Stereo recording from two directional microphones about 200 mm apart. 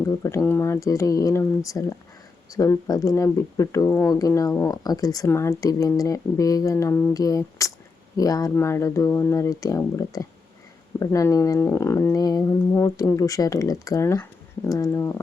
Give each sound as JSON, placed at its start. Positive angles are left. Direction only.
{"t": 0.2, "sound": "speech", "side_deg": 15}